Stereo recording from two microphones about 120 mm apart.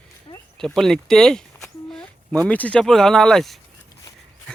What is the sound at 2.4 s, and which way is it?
Speech, 10° left (ahead or behind).